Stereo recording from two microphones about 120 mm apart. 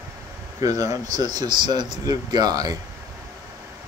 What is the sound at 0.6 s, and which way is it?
Speech, 30° right (ahead or behind).